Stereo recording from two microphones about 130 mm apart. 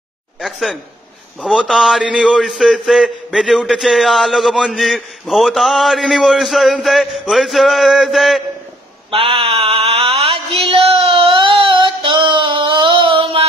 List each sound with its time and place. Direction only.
0.4 s a man's voice: centre (ahead or behind)
9.1 s mantra: 45° right (ahead or behind)